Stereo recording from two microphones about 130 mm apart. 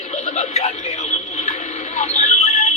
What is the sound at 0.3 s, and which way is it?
Speech, 60° left (ahead or behind).